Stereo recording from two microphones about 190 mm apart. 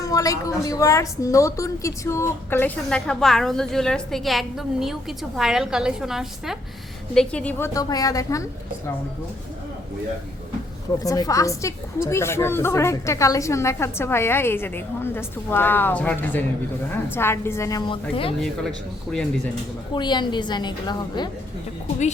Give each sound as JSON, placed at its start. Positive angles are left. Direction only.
{"t": 0.0, "sound": "a woman's voice", "side_deg": 20}
{"t": 11.0, "sound": "a woman's voice", "side_deg": 20}
{"t": 18.3, "sound": "a woman's voice", "side_deg": 0}
{"t": 19.9, "sound": "a woman's voice", "side_deg": 25}